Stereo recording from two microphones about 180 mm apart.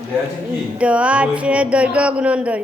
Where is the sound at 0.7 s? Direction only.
5° right (ahead or behind).